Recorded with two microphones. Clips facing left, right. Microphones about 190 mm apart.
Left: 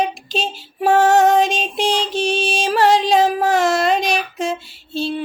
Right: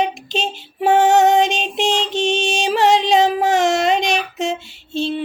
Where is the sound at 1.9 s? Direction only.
20° right (ahead or behind).